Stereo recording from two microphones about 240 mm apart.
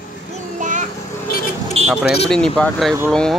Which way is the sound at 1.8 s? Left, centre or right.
Centre.